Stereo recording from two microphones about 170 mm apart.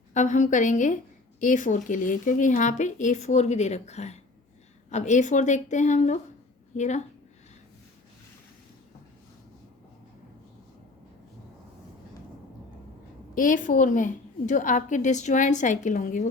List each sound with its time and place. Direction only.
0.1 s a woman's voice: 45° left (ahead or behind)
13.3 s a woman's voice: 50° left (ahead or behind)